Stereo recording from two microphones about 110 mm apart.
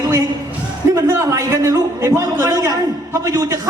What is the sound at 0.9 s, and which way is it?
A man's voice, 30° right (ahead or behind).